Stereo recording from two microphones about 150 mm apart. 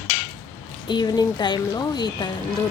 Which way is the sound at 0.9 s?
30° left (ahead or behind).